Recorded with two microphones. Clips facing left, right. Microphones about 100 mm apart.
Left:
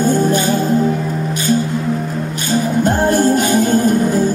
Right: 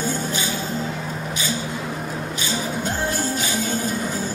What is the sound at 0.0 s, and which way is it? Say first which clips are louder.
Music: left 11 dB; 50° left (ahead or behind).